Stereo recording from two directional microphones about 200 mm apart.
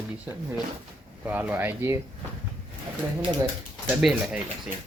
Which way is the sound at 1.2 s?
10° right (ahead or behind).